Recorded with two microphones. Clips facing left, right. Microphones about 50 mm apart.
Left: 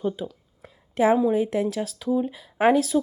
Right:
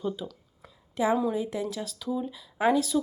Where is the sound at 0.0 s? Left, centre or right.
Left.